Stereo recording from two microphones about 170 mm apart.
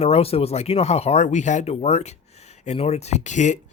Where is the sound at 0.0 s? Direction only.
35° left (ahead or behind).